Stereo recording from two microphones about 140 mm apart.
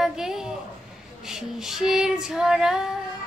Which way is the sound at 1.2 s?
5° right (ahead or behind).